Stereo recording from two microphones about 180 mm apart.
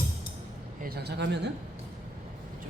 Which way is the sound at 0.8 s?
60° right (ahead or behind).